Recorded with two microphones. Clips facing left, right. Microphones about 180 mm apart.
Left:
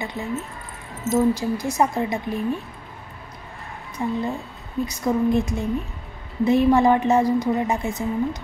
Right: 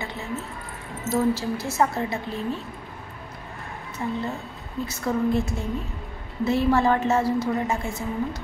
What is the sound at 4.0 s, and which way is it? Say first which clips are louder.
A woman's voice: left 4 dB; 15° left (ahead or behind).